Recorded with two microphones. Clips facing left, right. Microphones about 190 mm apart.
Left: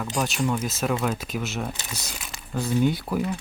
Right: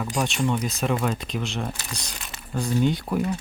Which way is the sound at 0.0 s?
Centre (ahead or behind).